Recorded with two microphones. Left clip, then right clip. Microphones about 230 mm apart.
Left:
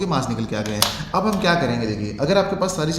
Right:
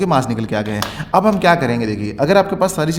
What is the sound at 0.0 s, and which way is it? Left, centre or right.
Speech, right.